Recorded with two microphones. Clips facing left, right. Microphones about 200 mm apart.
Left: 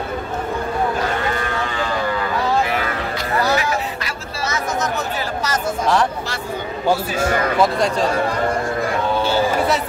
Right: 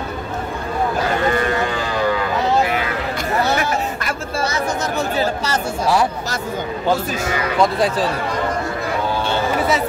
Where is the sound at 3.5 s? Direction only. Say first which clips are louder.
Even; 50° right (ahead or behind).